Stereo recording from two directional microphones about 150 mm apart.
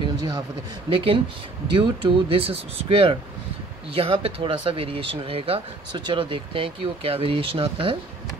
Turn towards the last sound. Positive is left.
turn(degrees=-35)  # may be behind; listen again after turning